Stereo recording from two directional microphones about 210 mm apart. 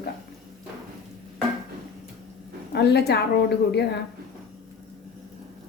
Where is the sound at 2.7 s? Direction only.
50° left (ahead or behind).